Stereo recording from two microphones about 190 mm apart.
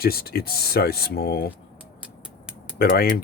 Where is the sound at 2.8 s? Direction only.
55° left (ahead or behind).